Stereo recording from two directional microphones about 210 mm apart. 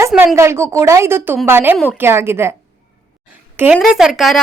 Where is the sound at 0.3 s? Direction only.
15° right (ahead or behind).